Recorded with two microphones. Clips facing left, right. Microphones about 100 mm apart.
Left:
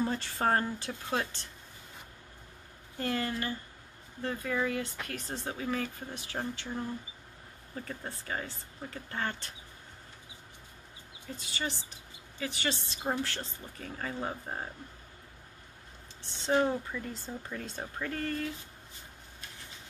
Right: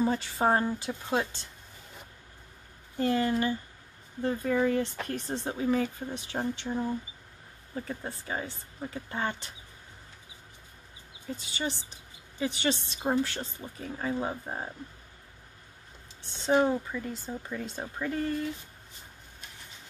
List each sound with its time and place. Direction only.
0.0 s speech: 10° right (ahead or behind)
3.0 s speech: 20° right (ahead or behind)
11.3 s speech: 20° right (ahead or behind)
16.4 s speech: 10° right (ahead or behind)